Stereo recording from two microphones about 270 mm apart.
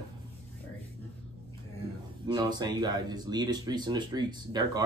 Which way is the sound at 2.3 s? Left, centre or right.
Centre.